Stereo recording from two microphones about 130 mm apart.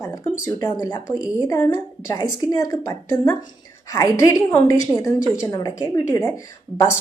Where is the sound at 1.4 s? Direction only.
25° left (ahead or behind).